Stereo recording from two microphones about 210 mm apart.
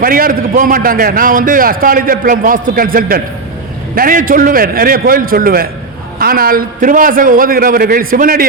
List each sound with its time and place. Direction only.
0.0 s a man's voice: 45° right (ahead or behind)